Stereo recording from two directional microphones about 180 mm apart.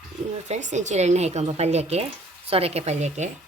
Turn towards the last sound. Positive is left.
turn(degrees=-40)  # may be behind; listen again after turning